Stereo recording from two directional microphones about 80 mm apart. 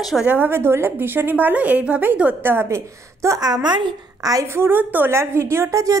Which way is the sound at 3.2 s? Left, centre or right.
Right.